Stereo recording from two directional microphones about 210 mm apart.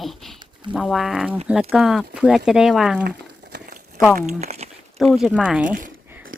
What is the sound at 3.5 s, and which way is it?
Crumpling, 50° right (ahead or behind).